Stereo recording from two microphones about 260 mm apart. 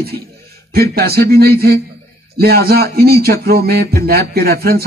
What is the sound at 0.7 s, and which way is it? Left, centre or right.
A man's voice, right.